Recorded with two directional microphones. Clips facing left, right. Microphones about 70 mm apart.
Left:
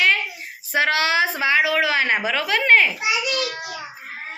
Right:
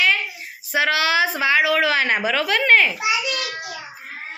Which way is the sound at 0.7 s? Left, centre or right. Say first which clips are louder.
Even; left.